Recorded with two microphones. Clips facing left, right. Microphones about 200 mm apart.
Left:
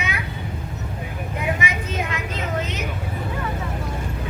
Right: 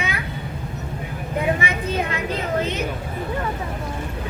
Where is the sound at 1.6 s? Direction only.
35° right (ahead or behind).